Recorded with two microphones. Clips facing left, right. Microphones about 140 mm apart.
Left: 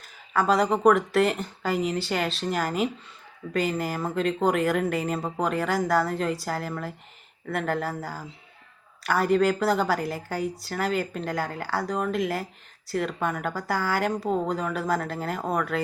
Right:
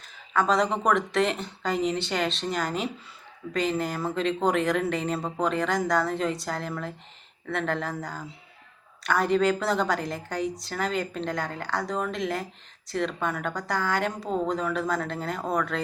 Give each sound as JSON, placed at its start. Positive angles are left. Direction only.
{"t": 0.0, "sound": "speech", "side_deg": 5}